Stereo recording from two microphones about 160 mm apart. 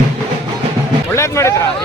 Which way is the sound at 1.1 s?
20° left (ahead or behind).